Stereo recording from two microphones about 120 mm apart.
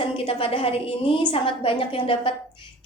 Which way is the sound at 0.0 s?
50° left (ahead or behind).